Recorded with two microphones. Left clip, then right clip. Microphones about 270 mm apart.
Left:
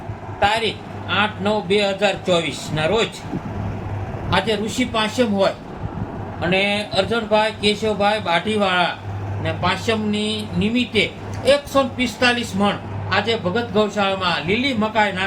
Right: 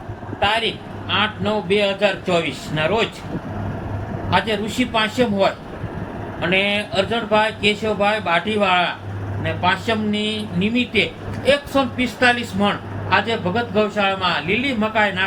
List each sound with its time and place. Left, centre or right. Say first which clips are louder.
0.3 s speech: left 1 dB; left
4.3 s speech: even; left
6.5 s speech: even; centre